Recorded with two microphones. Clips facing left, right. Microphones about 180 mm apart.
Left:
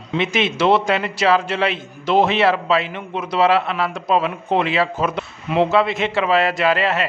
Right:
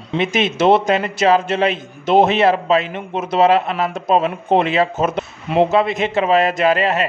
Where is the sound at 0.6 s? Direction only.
20° right (ahead or behind).